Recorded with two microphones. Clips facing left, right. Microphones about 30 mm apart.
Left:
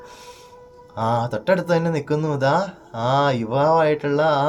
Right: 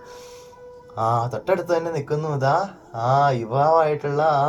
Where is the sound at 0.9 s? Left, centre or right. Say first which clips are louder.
Even; left.